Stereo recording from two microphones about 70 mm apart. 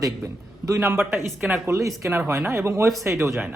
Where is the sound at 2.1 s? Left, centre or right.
Right.